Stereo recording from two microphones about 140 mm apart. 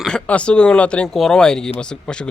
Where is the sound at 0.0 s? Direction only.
5° left (ahead or behind).